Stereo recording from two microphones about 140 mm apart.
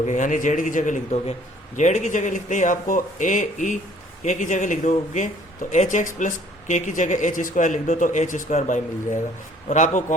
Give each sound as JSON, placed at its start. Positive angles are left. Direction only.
{"t": 0.0, "sound": "speech", "side_deg": 65}